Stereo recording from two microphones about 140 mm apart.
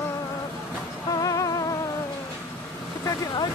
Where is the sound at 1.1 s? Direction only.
25° left (ahead or behind).